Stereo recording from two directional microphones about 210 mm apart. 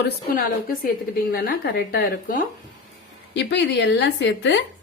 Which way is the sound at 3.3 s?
55° left (ahead or behind).